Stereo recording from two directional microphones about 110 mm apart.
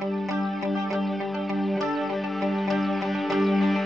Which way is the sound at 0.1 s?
Centre (ahead or behind).